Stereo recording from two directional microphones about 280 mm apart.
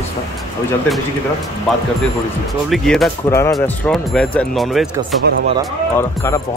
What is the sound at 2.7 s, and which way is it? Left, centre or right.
Speech, centre.